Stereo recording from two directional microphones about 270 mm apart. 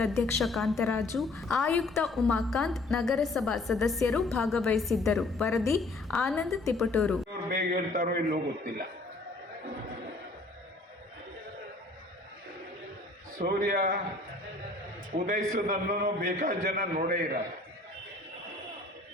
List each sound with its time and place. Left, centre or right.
0.0 s a woman's voice: centre
7.5 s a man's voice: right
13.4 s a man's voice: right
15.3 s a man's voice: right